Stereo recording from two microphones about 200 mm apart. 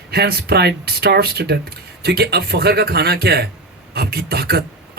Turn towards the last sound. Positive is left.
turn(degrees=-50)  # may be behind; listen again after turning